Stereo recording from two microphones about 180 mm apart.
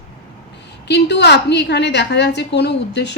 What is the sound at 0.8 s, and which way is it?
A woman's voice, 70° left (ahead or behind).